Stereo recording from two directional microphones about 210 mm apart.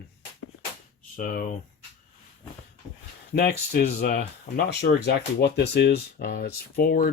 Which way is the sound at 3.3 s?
45° left (ahead or behind).